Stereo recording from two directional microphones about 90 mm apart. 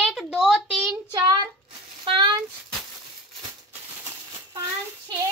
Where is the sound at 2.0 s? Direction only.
60° right (ahead or behind).